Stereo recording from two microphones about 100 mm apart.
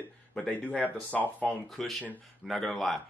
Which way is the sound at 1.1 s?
15° left (ahead or behind).